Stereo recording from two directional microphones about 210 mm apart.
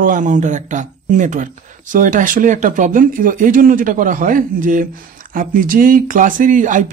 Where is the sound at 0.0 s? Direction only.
40° right (ahead or behind).